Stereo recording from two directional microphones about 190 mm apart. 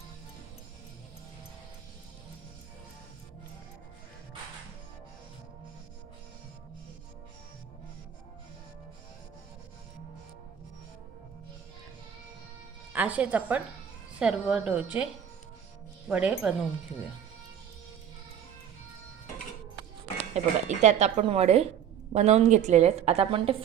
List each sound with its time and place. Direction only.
12.9 s a woman's voice: 10° right (ahead or behind)
16.0 s speech: 5° right (ahead or behind)
20.3 s a woman's voice: 35° right (ahead or behind)